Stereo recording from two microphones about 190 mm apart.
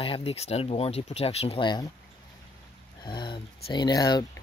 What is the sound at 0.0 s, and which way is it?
Speech, 30° left (ahead or behind).